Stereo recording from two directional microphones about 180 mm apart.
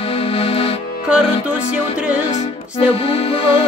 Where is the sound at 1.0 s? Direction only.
5° right (ahead or behind).